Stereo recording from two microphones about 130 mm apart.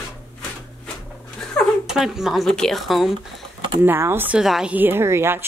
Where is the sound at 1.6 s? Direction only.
10° left (ahead or behind).